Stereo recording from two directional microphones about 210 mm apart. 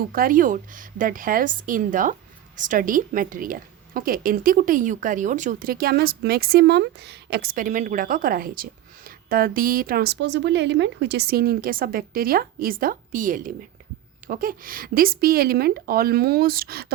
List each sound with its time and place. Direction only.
0.1 s a woman's voice: 40° right (ahead or behind)